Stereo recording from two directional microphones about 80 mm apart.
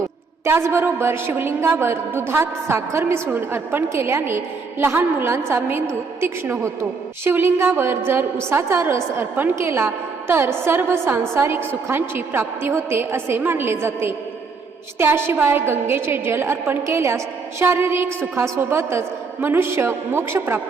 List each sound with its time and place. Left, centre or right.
0.4 s a woman's voice: right